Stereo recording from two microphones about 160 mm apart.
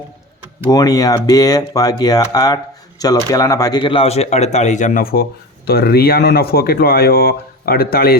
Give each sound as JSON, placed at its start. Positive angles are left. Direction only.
{"t": 0.7, "sound": "speech", "side_deg": 25}
{"t": 5.6, "sound": "speech", "side_deg": 75}